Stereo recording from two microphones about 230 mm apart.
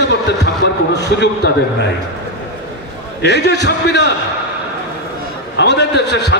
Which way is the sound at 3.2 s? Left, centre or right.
Left.